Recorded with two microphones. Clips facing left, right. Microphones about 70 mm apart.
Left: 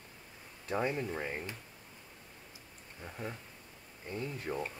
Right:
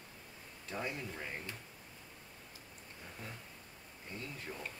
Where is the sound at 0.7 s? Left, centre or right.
Left.